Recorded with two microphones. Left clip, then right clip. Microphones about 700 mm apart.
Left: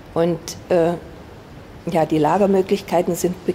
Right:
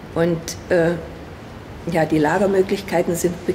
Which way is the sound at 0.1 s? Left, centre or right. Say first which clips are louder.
Even; left.